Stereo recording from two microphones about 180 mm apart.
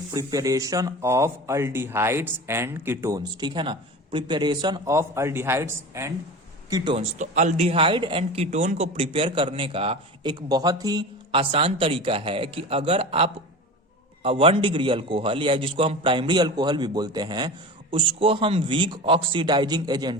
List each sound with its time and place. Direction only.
0.1 s speech: 20° right (ahead or behind)
6.9 s speech: 40° right (ahead or behind)
10.5 s a man's voice: 20° right (ahead or behind)